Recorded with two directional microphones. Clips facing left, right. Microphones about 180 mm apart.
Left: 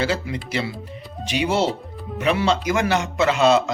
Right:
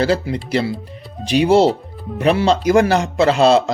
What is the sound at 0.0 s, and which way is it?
Speech, 35° right (ahead or behind).